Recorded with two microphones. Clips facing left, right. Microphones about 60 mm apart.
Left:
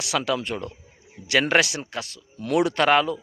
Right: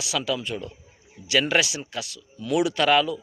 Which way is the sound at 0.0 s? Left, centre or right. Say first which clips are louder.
Left 2 dB; left.